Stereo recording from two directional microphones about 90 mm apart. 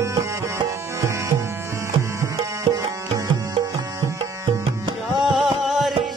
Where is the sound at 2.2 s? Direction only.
40° right (ahead or behind).